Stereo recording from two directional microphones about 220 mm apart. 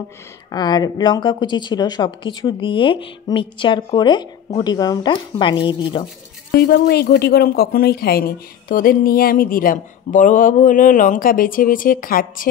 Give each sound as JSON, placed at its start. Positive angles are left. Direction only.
{"t": 0.5, "sound": "a woman's voice", "side_deg": 20}
{"t": 6.5, "sound": "speech", "side_deg": 45}